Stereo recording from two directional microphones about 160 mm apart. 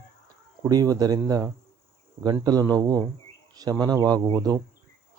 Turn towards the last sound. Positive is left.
turn(degrees=-25)  # may be behind; listen again after turning